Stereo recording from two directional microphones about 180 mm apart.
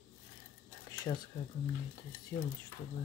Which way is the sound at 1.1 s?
25° left (ahead or behind).